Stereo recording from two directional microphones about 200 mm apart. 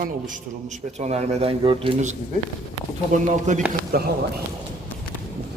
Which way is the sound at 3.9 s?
50° right (ahead or behind).